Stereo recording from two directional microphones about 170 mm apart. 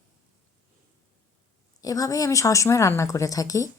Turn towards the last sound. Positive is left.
turn(degrees=20)  # may be behind; listen again after turning